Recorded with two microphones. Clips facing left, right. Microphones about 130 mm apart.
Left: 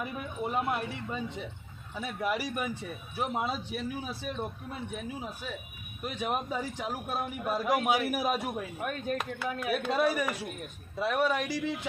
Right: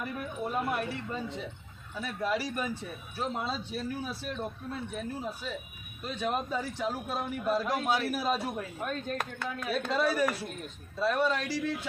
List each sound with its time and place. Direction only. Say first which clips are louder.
0.0 s speech: even; 20° left (ahead or behind)
2.0 s a man's voice: even; 15° left (ahead or behind)